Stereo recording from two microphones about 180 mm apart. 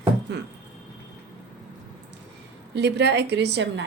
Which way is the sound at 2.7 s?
70° right (ahead or behind).